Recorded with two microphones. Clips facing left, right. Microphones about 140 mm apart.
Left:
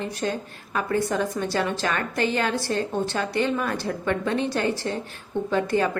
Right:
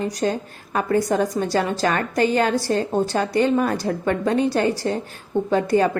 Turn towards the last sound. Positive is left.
turn(degrees=-40)  # may be behind; listen again after turning